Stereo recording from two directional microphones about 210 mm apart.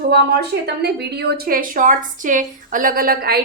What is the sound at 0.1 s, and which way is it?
Speech, 50° right (ahead or behind).